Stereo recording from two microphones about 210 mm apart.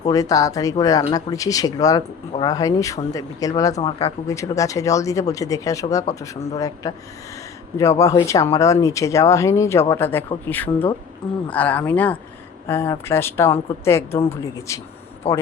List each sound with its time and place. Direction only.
0.1 s speech: 15° left (ahead or behind)
15.2 s a man's voice: 30° left (ahead or behind)